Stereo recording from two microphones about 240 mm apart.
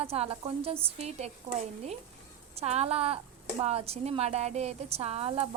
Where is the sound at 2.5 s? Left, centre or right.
Right.